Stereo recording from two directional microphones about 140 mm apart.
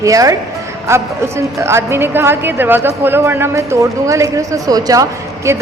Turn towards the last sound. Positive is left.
turn(degrees=-20)  # may be behind; listen again after turning